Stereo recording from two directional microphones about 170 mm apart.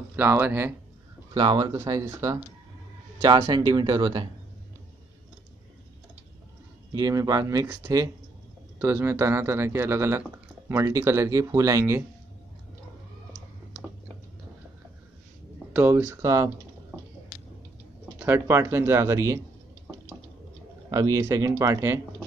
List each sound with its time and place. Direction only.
0.1 s speech: 10° right (ahead or behind)
1.3 s speech: 25° right (ahead or behind)
6.9 s speech: 20° right (ahead or behind)
15.7 s speech: 10° right (ahead or behind)
18.2 s speech: 15° right (ahead or behind)
20.9 s speech: 20° right (ahead or behind)